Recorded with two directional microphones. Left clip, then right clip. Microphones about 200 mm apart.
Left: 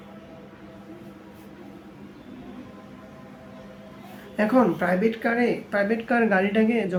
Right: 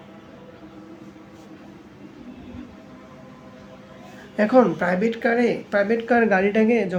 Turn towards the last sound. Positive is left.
turn(degrees=-20)  # may be behind; listen again after turning